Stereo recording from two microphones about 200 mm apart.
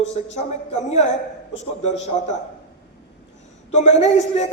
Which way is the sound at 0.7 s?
35° left (ahead or behind).